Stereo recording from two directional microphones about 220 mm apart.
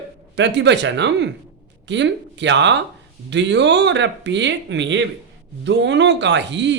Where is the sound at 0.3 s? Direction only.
55° right (ahead or behind).